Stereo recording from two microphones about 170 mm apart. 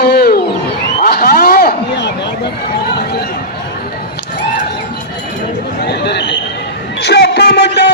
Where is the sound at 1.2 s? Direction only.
65° left (ahead or behind).